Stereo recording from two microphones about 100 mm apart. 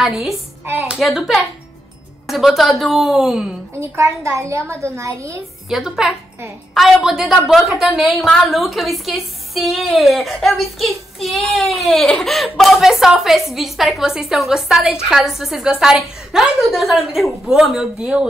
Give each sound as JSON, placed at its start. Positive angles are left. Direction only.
{"t": 0.0, "sound": "a woman's voice", "side_deg": 0}
{"t": 3.8, "sound": "a woman's voice", "side_deg": -25}
{"t": 5.7, "sound": "a woman's voice", "side_deg": -5}